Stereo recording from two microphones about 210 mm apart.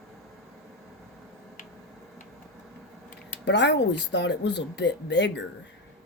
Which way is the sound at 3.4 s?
55° left (ahead or behind).